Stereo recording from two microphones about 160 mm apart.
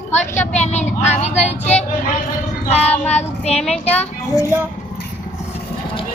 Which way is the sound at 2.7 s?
40° left (ahead or behind).